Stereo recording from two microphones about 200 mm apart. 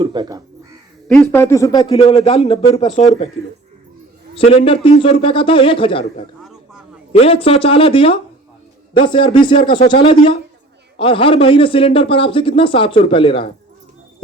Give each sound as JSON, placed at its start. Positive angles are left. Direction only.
{"t": 0.0, "sound": "speech", "side_deg": -20}
{"t": 1.0, "sound": "speech", "side_deg": 10}
{"t": 2.2, "sound": "speech", "side_deg": 30}
{"t": 4.4, "sound": "a man's voice", "side_deg": 30}
{"t": 6.4, "sound": "a sound", "side_deg": 0}
{"t": 7.1, "sound": "a man's voice", "side_deg": 30}